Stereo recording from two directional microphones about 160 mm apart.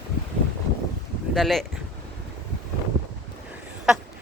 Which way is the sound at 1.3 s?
Centre (ahead or behind).